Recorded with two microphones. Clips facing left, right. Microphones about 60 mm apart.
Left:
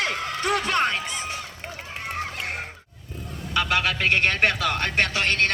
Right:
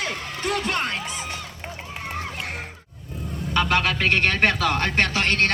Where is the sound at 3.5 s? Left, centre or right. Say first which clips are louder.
Right 2 dB; centre.